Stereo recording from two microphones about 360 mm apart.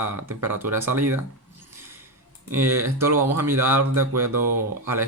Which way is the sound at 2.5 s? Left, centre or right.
Centre.